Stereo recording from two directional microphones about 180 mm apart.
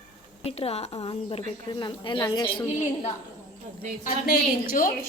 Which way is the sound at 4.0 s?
50° left (ahead or behind).